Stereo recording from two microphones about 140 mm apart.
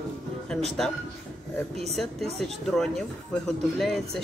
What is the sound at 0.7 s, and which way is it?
Speech, centre (ahead or behind).